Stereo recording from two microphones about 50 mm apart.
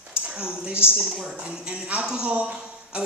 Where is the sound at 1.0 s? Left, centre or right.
Centre.